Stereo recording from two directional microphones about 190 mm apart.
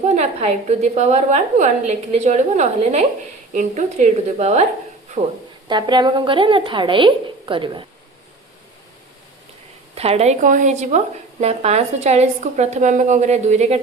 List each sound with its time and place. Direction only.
0.0 s speech: 35° right (ahead or behind)
5.6 s speech: 25° right (ahead or behind)
9.9 s speech: 30° right (ahead or behind)